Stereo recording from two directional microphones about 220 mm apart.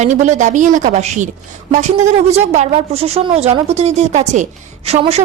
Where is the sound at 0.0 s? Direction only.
35° right (ahead or behind).